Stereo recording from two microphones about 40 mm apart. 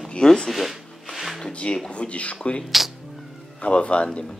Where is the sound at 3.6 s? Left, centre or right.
Left.